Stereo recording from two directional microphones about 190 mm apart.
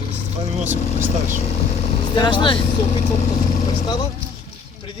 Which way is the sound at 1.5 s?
30° left (ahead or behind).